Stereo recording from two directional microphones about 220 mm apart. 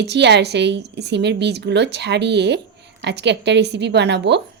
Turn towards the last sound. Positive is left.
turn(degrees=-50)  # may be behind; listen again after turning